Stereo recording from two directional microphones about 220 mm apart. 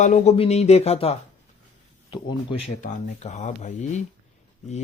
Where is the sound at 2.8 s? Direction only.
35° left (ahead or behind).